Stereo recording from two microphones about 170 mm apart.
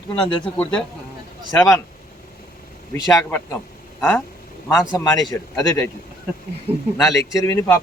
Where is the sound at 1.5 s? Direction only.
15° left (ahead or behind).